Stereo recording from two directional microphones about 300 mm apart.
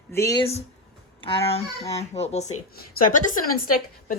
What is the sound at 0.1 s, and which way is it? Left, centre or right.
A woman's voice, centre.